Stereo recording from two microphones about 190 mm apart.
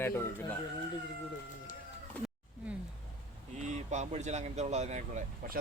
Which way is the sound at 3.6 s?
35° right (ahead or behind).